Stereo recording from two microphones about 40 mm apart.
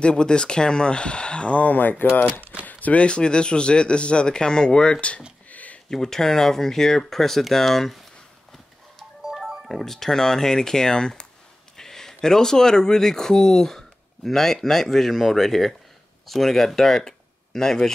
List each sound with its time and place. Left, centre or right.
0.0 s speech: left
2.6 s a sound: left
3.0 s speech: left
5.5 s a sound: left
5.9 s speech: centre
9.7 s speech: centre